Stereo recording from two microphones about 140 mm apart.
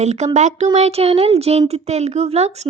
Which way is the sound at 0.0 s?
50° right (ahead or behind).